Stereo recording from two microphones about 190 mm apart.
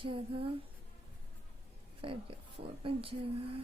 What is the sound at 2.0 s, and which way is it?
A woman's voice, 30° right (ahead or behind).